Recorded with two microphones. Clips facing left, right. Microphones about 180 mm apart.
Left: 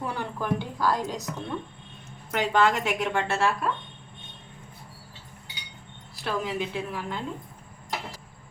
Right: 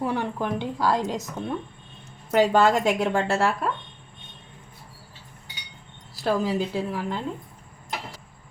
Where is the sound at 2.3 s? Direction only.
40° right (ahead or behind).